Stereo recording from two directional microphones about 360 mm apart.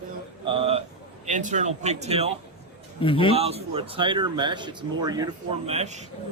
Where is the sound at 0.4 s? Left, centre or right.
Centre.